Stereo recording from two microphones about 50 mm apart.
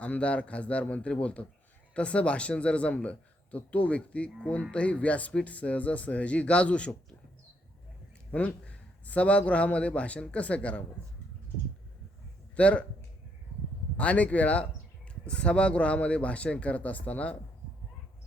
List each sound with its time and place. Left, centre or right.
0.0 s a man's voice: left
8.3 s a man's voice: left
12.5 s speech: left
13.9 s a man's voice: left